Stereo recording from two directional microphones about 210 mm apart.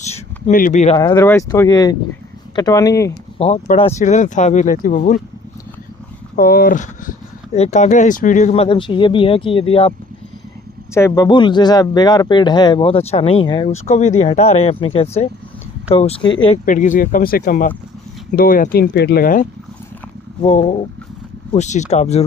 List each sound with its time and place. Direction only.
0.0 s a sound: 30° left (ahead or behind)
0.9 s speech: 15° left (ahead or behind)
3.3 s speech: 30° left (ahead or behind)
6.3 s speech: 45° left (ahead or behind); by 9.9 s 25° left (ahead or behind)
10.9 s speech: 15° left (ahead or behind)
16.6 s speech: 35° left (ahead or behind)
20.4 s speech: 30° left (ahead or behind)